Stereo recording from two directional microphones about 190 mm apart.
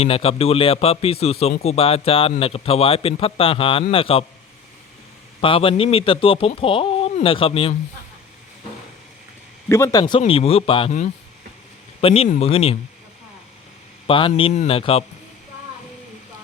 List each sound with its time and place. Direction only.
0.0 s speech: 30° left (ahead or behind)
5.4 s speech: 30° left (ahead or behind)
9.6 s speech: 15° left (ahead or behind)
11.9 s speech: 30° left (ahead or behind)
14.1 s speech: 30° left (ahead or behind)